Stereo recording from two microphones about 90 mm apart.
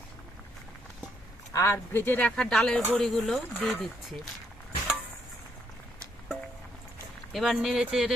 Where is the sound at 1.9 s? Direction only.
20° left (ahead or behind); by 3.9 s centre (ahead or behind).